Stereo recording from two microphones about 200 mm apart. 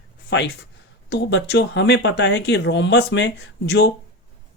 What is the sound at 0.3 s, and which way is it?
Speech, 55° left (ahead or behind).